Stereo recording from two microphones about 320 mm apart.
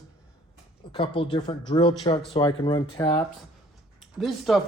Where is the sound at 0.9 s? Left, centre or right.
Centre.